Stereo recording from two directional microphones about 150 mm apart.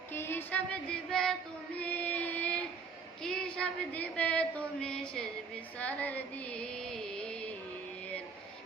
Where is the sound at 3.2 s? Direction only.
5° left (ahead or behind).